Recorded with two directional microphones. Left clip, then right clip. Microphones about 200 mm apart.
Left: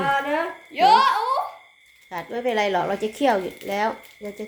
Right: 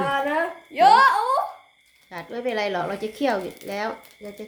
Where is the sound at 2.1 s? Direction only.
5° left (ahead or behind).